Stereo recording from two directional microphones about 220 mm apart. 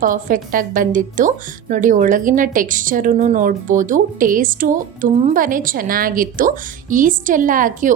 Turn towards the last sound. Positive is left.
turn(degrees=-35)  # may be behind; listen again after turning